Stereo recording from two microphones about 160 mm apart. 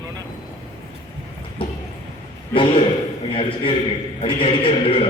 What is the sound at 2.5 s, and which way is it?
A man's voice, 30° left (ahead or behind).